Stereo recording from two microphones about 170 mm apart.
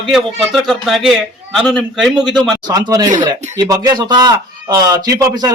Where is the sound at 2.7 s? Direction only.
20° right (ahead or behind).